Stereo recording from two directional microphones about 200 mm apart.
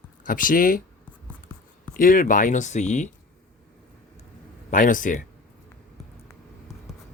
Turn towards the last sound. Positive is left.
turn(degrees=40)  # may be behind; listen again after turning